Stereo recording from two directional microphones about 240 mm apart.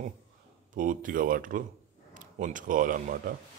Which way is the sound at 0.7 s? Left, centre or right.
Right.